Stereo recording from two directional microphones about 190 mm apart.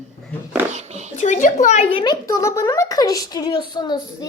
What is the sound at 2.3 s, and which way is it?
A woman's voice, 15° left (ahead or behind).